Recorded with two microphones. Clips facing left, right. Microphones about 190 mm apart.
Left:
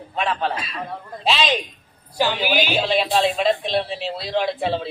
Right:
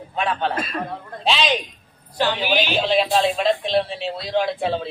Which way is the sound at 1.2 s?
Centre (ahead or behind).